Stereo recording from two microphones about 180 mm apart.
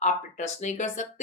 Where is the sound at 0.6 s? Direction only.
40° left (ahead or behind).